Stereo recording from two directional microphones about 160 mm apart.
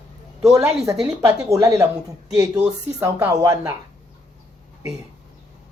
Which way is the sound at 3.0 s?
15° right (ahead or behind).